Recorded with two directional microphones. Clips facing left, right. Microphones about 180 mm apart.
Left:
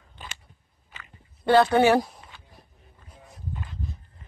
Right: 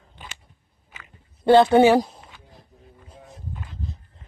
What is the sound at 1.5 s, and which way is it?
Speech, 25° right (ahead or behind).